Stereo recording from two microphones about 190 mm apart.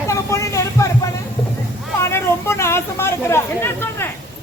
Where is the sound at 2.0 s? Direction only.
15° left (ahead or behind).